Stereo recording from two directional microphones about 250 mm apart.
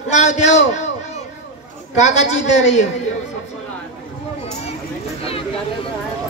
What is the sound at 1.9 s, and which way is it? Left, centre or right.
Speech, left.